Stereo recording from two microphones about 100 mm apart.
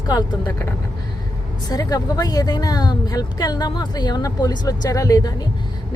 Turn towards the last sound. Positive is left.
turn(degrees=35)  # may be behind; listen again after turning